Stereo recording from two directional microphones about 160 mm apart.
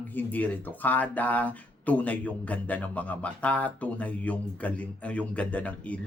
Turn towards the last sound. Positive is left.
turn(degrees=10)  # may be behind; listen again after turning